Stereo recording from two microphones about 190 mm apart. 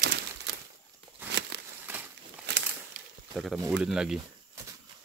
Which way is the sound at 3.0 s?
45° right (ahead or behind).